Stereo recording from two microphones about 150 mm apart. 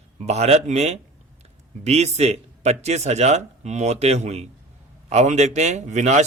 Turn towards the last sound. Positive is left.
turn(degrees=-50)  # may be behind; listen again after turning